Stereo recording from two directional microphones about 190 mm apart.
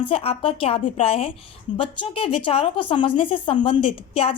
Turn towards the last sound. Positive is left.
turn(degrees=30)  # may be behind; listen again after turning